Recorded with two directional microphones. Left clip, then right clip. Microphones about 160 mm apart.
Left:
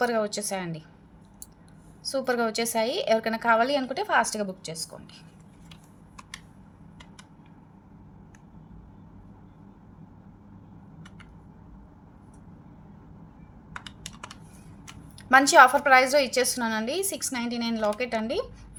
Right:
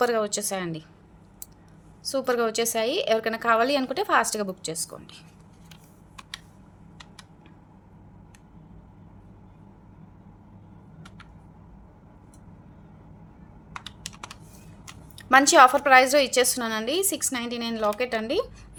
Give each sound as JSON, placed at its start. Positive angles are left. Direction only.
{"t": 0.0, "sound": "a woman's voice", "side_deg": -25}
{"t": 2.0, "sound": "a woman's voice", "side_deg": -20}
{"t": 13.7, "sound": "computer keyboard", "side_deg": -25}
{"t": 15.2, "sound": "a woman's voice", "side_deg": -20}